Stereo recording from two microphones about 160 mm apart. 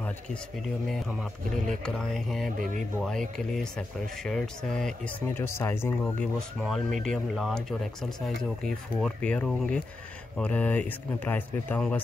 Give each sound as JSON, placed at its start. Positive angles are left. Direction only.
{"t": 2.0, "sound": "speech", "side_deg": 5}
{"t": 2.5, "sound": "speech", "side_deg": -55}
{"t": 3.1, "sound": "speech", "side_deg": 5}
{"t": 6.6, "sound": "speech", "side_deg": 0}